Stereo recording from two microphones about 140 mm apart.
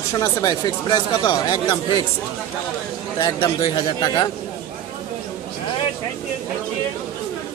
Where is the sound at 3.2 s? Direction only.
30° left (ahead or behind).